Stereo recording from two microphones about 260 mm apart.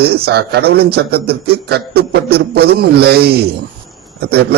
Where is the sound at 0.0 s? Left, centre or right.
Right.